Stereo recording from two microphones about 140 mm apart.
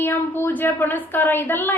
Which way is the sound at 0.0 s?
15° left (ahead or behind).